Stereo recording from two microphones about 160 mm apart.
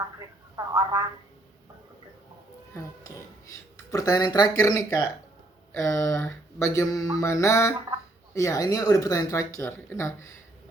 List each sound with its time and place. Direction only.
0.2 s speech: 20° right (ahead or behind)
3.9 s speech: 25° left (ahead or behind)